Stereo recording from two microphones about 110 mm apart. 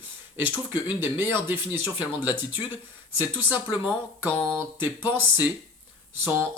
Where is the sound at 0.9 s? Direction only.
20° right (ahead or behind).